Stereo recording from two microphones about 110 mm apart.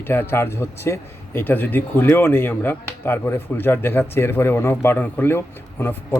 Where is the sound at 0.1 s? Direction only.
20° left (ahead or behind).